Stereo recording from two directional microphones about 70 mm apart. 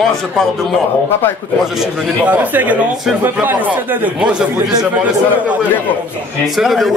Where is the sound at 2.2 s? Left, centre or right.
Right.